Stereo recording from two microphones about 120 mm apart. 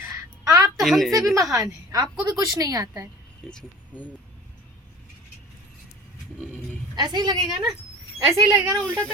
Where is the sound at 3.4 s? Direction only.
10° left (ahead or behind).